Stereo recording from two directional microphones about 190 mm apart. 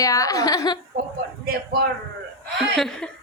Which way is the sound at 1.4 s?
50° right (ahead or behind).